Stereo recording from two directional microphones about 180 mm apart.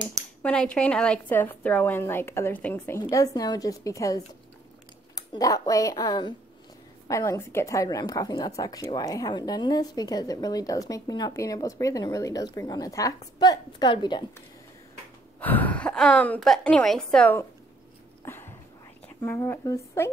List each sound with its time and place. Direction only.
0.4 s a woman's voice: 5° left (ahead or behind); by 14.2 s 25° left (ahead or behind)
15.4 s a woman's voice: 10° left (ahead or behind)
18.2 s a sound: 15° left (ahead or behind)
19.2 s a woman's voice: 10° left (ahead or behind)